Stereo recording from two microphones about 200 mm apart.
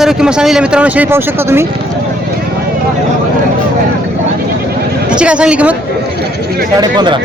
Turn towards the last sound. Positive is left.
turn(degrees=-20)  # may be behind; listen again after turning